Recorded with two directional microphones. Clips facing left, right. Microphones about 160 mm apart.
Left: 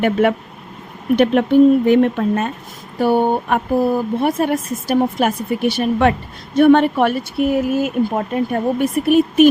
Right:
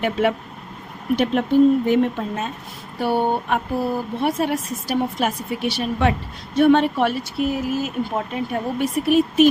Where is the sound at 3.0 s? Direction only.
45° left (ahead or behind).